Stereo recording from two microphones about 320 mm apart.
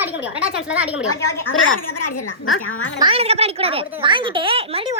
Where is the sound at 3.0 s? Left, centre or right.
Centre.